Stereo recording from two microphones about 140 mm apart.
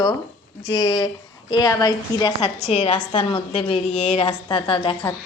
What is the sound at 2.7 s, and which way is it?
Speech, 50° left (ahead or behind).